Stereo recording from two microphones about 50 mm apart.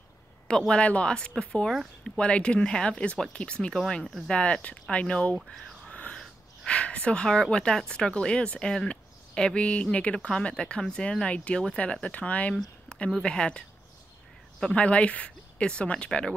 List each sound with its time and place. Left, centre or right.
0.5 s a woman's voice: centre
5.9 s whispering: left
6.6 s speech: left
7.2 s a woman's voice: centre
8.8 s a sound: centre
9.7 s a woman's voice: left
12.5 s a sound: centre
13.2 s speech: centre
14.8 s a woman's voice: left